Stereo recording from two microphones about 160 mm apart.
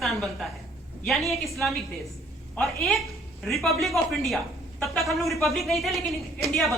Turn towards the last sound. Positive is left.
turn(degrees=0)  # may be behind; listen again after turning